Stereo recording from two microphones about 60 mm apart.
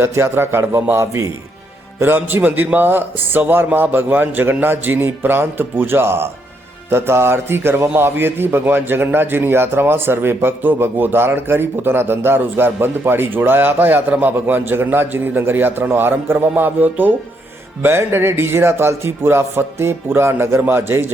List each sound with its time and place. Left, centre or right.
0.0 s a man's voice: right
2.0 s a man's voice: right
17.8 s a man's voice: right